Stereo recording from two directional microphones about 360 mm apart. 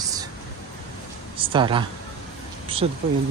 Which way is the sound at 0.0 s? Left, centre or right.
Centre.